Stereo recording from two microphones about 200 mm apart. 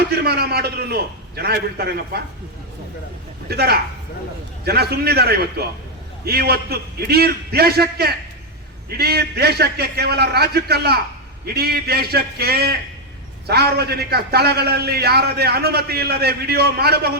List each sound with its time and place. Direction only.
0.2 s a man's voice: 50° right (ahead or behind)
3.5 s a man's voice: 50° right (ahead or behind)